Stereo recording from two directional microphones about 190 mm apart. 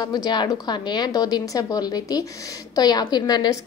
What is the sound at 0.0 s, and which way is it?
A woman's voice, 20° left (ahead or behind).